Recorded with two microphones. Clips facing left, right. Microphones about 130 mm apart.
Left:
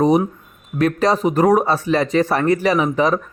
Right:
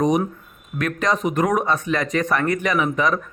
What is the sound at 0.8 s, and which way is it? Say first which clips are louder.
Speech: left 5 dB; 35° left (ahead or behind).